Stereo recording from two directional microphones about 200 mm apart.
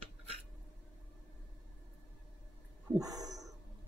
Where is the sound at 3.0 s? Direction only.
20° right (ahead or behind).